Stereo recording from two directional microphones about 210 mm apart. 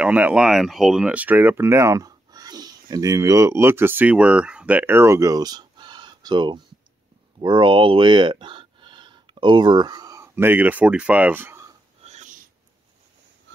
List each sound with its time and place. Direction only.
0.0 s speech: 5° right (ahead or behind)
12.0 s filing: 35° right (ahead or behind)